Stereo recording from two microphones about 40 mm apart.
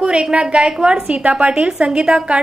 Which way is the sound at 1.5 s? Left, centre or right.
Centre.